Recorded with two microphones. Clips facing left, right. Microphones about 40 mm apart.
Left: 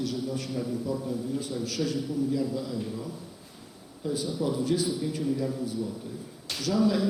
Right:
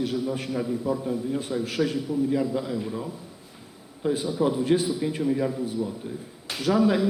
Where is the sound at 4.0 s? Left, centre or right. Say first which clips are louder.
Right 6 dB; right.